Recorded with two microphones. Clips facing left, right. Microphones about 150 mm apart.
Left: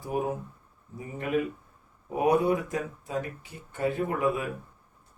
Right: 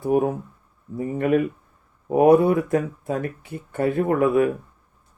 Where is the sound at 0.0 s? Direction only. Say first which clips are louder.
Right 9 dB; 60° right (ahead or behind).